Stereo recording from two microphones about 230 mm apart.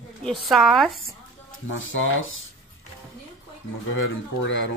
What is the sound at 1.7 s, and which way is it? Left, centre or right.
Speech, left.